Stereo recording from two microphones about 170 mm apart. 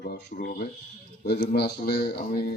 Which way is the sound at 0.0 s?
60° left (ahead or behind).